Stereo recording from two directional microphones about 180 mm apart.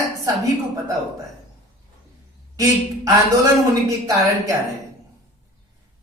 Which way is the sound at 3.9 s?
15° right (ahead or behind).